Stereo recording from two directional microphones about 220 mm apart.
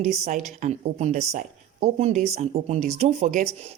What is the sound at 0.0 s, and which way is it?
Speech, 35° right (ahead or behind).